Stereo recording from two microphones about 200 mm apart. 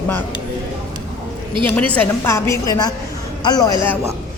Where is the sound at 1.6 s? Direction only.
5° left (ahead or behind).